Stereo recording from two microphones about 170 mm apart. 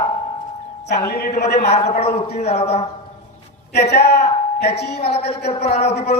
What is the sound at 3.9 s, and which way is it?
A man's voice, 75° left (ahead or behind).